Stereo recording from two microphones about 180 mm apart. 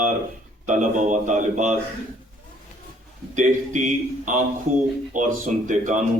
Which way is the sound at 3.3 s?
45° right (ahead or behind).